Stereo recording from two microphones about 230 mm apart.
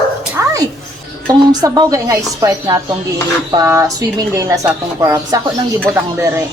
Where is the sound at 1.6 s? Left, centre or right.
Centre.